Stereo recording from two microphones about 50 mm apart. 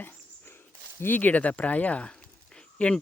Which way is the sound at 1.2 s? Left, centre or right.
Left.